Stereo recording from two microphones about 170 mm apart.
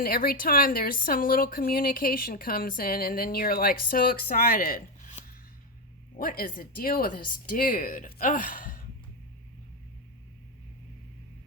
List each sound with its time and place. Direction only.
0.0 s speech: 60° left (ahead or behind)
6.1 s speech: 60° left (ahead or behind)